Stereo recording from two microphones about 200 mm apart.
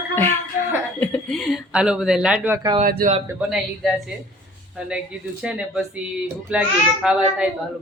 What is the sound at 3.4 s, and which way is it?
Speech, centre (ahead or behind).